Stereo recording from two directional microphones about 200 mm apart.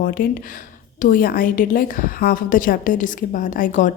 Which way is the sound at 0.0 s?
45° left (ahead or behind).